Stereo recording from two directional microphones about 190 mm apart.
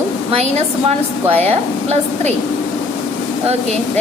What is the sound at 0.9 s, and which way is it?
Speech, 35° right (ahead or behind).